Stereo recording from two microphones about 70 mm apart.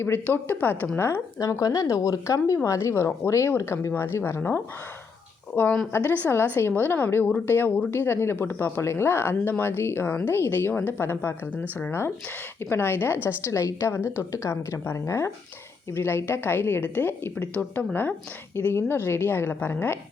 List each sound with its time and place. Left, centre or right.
0.3 s speech: left
1.4 s speech: left
2.6 s speech: left